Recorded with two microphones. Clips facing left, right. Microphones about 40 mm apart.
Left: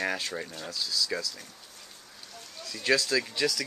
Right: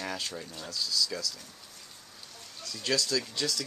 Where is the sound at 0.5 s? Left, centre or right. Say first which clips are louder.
Left 1 dB; centre.